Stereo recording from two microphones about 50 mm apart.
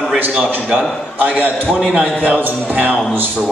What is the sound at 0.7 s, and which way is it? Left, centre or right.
A man's voice, right.